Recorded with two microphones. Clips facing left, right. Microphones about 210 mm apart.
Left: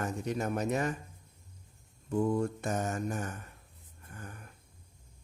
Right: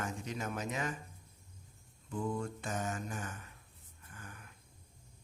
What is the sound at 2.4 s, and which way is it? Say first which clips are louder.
Speech: left 7 dB; 40° left (ahead or behind).